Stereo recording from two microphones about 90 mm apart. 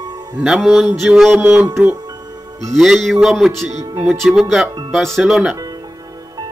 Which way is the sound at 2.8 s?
5° right (ahead or behind).